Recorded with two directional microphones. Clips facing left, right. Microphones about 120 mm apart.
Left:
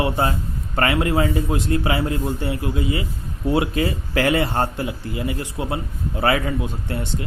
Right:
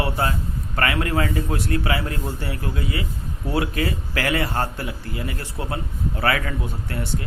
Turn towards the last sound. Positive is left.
turn(degrees=25)  # may be behind; listen again after turning